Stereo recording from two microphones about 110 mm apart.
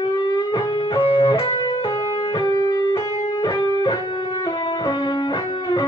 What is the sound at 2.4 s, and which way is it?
Music, 40° left (ahead or behind).